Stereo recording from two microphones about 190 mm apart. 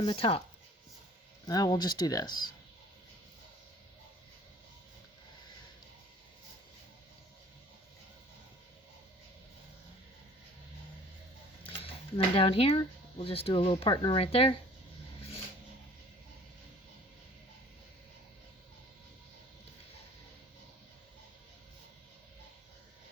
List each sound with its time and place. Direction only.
0.0 s speech: 30° left (ahead or behind)
1.5 s speech: 20° left (ahead or behind)
11.8 s speech: 30° left (ahead or behind)